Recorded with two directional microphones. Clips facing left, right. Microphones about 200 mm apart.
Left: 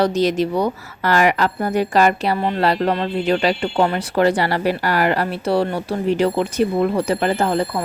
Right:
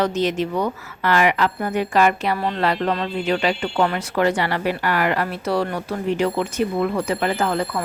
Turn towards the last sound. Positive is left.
turn(degrees=30)  # may be behind; listen again after turning